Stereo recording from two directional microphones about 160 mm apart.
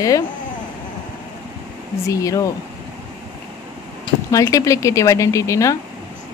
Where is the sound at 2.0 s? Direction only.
20° left (ahead or behind).